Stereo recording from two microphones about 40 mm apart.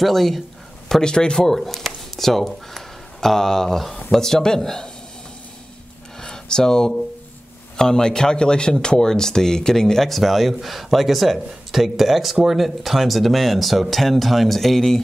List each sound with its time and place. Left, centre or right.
0.0 s speech: centre
1.0 s a man's voice: centre
6.2 s a man's voice: centre